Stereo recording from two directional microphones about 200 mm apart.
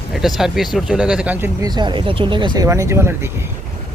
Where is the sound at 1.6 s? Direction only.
20° right (ahead or behind).